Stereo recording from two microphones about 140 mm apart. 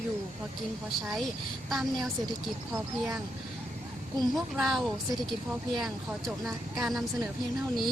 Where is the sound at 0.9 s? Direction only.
Centre (ahead or behind).